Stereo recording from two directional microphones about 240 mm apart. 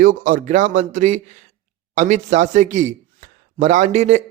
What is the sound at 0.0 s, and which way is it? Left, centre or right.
A man's voice, right.